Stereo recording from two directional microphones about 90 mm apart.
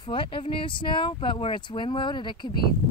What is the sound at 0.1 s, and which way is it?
Speech, 75° left (ahead or behind).